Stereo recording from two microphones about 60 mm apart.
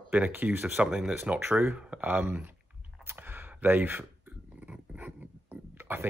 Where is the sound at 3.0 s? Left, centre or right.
Right.